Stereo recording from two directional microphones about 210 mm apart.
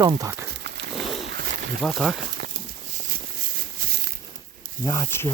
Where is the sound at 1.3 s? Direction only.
45° right (ahead or behind).